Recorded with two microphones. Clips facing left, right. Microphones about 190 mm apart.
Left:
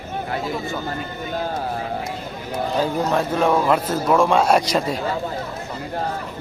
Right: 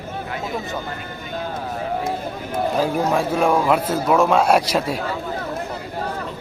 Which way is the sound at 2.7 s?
5° right (ahead or behind).